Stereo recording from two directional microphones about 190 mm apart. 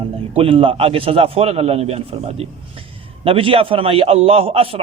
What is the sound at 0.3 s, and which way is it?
A man's voice, 30° right (ahead or behind).